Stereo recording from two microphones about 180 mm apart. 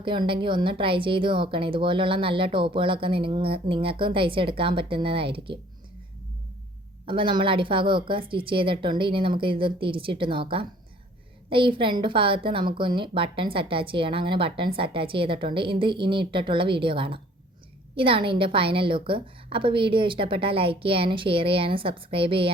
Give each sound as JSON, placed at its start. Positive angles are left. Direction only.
{"t": 0.0, "sound": "a woman's voice", "side_deg": -25}
{"t": 7.0, "sound": "a woman's voice", "side_deg": -30}